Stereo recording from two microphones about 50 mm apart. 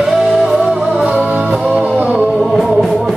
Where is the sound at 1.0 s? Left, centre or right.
Right.